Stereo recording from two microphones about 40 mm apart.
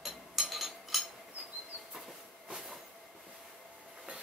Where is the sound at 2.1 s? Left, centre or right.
Centre.